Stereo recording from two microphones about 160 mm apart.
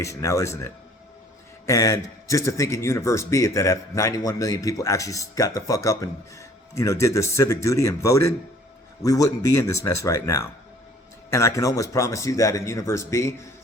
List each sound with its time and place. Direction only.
0.0 s a man's voice: 20° left (ahead or behind)